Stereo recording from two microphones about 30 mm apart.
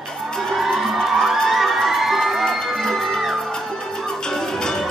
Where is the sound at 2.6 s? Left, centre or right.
Centre.